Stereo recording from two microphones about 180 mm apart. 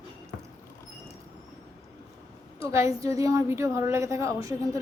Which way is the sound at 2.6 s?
15° right (ahead or behind).